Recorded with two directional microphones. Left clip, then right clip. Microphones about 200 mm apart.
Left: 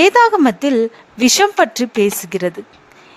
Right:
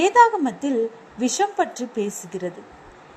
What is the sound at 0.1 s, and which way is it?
Speech, 45° left (ahead or behind).